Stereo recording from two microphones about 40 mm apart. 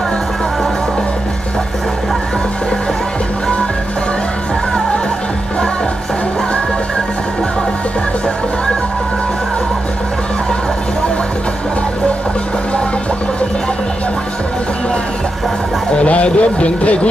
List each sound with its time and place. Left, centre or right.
15.9 s speech: left